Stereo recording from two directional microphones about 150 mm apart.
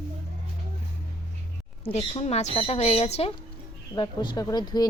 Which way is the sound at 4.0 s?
25° left (ahead or behind).